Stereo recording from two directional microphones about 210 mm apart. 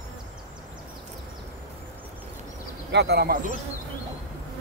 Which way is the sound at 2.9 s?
50° right (ahead or behind).